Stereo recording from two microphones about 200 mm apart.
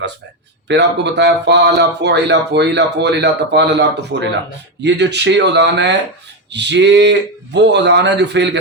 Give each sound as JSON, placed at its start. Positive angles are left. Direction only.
{"t": 0.7, "sound": "speech", "side_deg": -60}